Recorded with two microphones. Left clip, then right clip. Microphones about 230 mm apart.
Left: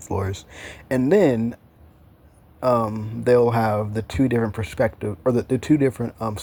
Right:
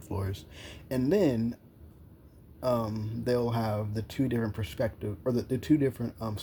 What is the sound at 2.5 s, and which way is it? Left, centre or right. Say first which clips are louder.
Speech: left 10 dB; left.